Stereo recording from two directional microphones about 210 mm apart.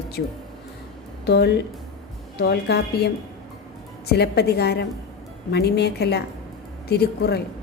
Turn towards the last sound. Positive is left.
turn(degrees=50)  # may be behind; listen again after turning